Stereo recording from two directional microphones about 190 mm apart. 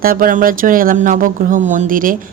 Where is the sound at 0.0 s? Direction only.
50° right (ahead or behind).